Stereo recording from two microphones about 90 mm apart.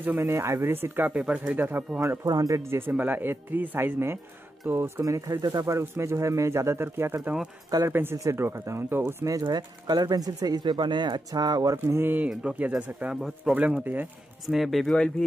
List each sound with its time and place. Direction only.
0.0 s speech: 25° right (ahead or behind)
2.2 s speech: 40° right (ahead or behind); by 5.0 s 25° right (ahead or behind)
5.0 s speech: 40° right (ahead or behind)
9.3 s speech: 50° right (ahead or behind)
11.9 s speech: 25° right (ahead or behind); by 15.2 s 5° left (ahead or behind)